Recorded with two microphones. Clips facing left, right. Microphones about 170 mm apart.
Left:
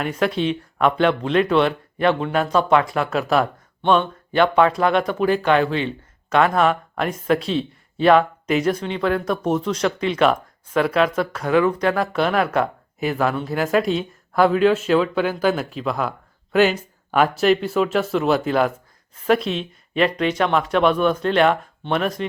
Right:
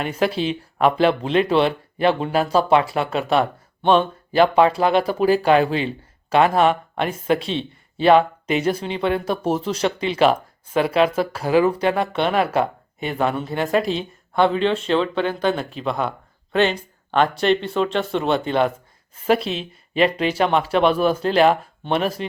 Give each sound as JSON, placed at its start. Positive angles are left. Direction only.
{"t": 0.0, "sound": "speech", "side_deg": 0}
{"t": 0.9, "sound": "speech", "side_deg": -30}
{"t": 3.1, "sound": "speech", "side_deg": 0}
{"t": 4.3, "sound": "speech", "side_deg": -30}
{"t": 6.9, "sound": "speech", "side_deg": 0}
{"t": 8.0, "sound": "speech", "side_deg": -30}
{"t": 12.1, "sound": "speech", "side_deg": 0}
{"t": 20.3, "sound": "speech", "side_deg": -30}
{"t": 20.7, "sound": "speech", "side_deg": 0}
{"t": 21.2, "sound": "speech", "side_deg": -35}